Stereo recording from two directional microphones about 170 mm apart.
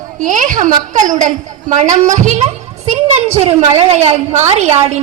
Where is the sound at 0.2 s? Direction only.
50° right (ahead or behind).